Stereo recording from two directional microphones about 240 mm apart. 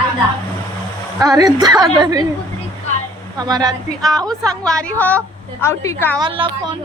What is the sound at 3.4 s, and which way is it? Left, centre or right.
Speech, centre.